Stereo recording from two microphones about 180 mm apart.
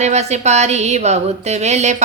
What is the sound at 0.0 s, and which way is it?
A woman's voice, 40° right (ahead or behind).